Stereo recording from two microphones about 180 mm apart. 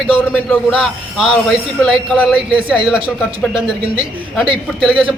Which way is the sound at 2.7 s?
5° right (ahead or behind).